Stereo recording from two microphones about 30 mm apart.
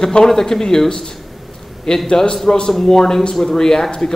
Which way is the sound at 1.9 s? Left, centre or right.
Left.